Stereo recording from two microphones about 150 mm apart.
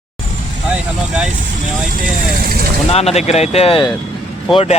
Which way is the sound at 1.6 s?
65° right (ahead or behind).